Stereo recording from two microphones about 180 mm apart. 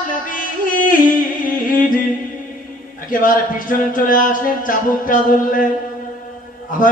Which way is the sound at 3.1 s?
50° left (ahead or behind).